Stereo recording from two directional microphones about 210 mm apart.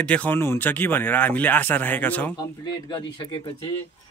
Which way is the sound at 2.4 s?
20° left (ahead or behind).